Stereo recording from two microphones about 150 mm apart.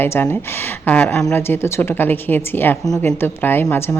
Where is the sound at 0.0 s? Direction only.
15° left (ahead or behind).